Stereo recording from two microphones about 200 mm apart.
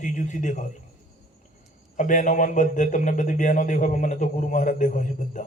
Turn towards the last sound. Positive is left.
turn(degrees=40)  # may be behind; listen again after turning